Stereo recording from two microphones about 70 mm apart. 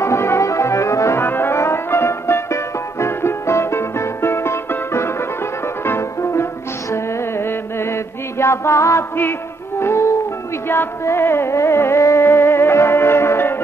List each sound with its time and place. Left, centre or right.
0.0 s brass instrument: left
5.9 s music: left
6.9 s mantra: left
9.8 s music: left